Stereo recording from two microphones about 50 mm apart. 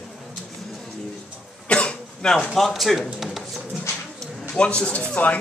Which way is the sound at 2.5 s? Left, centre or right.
Centre.